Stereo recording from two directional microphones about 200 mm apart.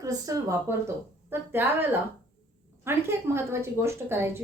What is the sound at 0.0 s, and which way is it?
A woman's voice, 15° right (ahead or behind).